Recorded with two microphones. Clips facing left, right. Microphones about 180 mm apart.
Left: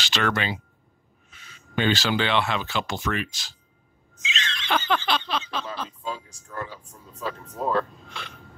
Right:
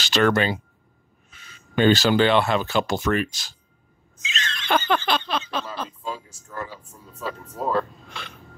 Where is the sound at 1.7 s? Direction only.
40° right (ahead or behind).